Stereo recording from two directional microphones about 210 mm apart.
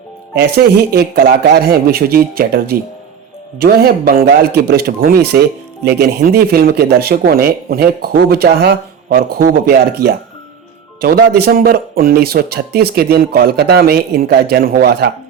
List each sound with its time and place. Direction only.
0.3 s speech: 45° right (ahead or behind)